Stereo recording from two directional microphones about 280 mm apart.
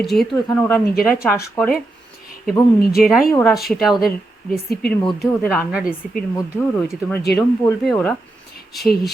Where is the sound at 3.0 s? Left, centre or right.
Centre.